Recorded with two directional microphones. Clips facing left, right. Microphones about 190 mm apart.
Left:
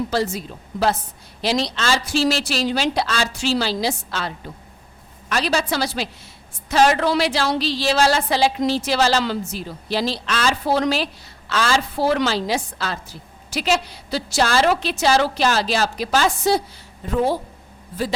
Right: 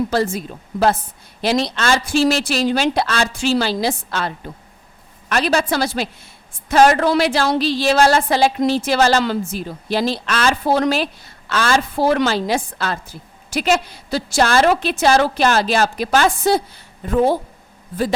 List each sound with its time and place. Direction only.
0.1 s a woman's voice: 50° right (ahead or behind)
5.3 s a woman's voice: 55° right (ahead or behind)